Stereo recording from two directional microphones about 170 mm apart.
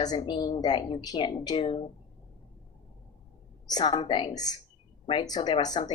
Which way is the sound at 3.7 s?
25° left (ahead or behind).